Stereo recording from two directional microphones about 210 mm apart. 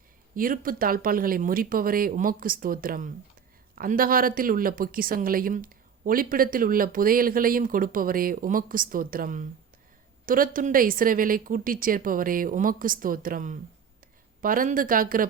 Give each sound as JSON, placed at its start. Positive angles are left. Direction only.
{"t": 0.3, "sound": "speech", "side_deg": -40}